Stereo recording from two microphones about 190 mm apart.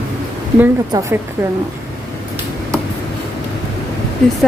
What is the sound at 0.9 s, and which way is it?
Speech, 15° right (ahead or behind).